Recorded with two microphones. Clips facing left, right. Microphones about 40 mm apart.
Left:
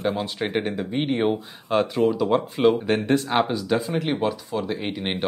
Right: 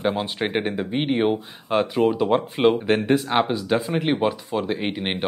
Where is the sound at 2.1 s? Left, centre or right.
Right.